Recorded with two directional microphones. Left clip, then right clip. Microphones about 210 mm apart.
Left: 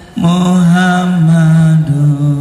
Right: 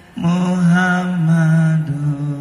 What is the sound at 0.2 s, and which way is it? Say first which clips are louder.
Mantra: left 7 dB; 40° left (ahead or behind).